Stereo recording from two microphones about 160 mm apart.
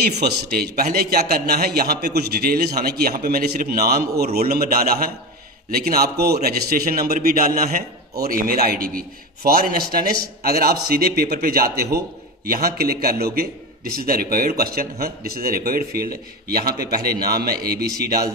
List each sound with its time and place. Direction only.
0.2 s a man's voice: 75° right (ahead or behind)